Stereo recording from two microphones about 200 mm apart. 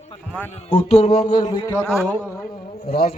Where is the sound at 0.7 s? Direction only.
30° left (ahead or behind).